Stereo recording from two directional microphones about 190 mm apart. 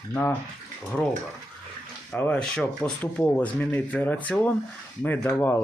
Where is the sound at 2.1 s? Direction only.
5° left (ahead or behind).